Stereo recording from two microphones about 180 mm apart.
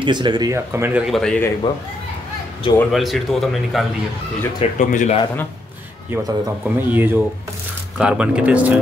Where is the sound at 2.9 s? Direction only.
Centre (ahead or behind).